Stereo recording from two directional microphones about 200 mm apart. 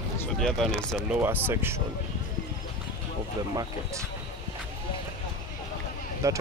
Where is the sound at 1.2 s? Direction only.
10° right (ahead or behind).